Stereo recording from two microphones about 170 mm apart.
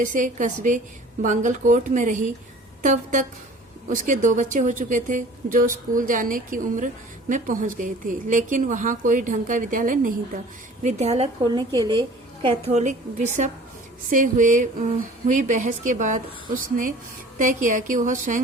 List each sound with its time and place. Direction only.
0.0 s speech: 50° right (ahead or behind)
10.8 s a woman's voice: 40° right (ahead or behind)
11.4 s a woman's voice: 25° right (ahead or behind)
12.7 s speech: 45° right (ahead or behind)